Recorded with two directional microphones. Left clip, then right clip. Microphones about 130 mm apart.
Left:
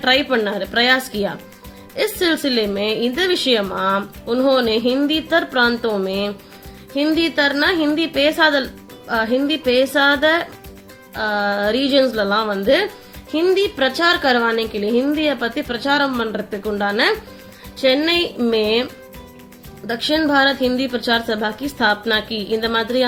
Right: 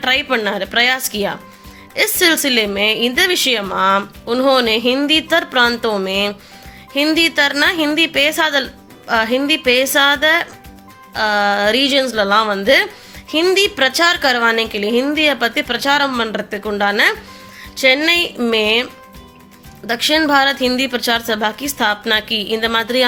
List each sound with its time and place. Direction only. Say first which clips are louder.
0.0 s a woman's voice: right 1 dB; 15° right (ahead or behind)
19.9 s a woman's voice: right 4 dB; 15° right (ahead or behind)